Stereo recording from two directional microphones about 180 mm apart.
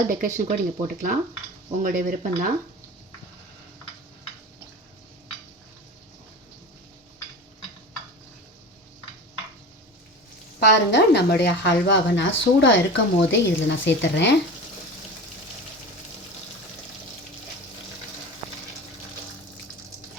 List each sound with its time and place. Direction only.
0.1 s speech: 45° right (ahead or behind)
10.6 s speech: 70° left (ahead or behind)
12.1 s a woman's voice: 90° left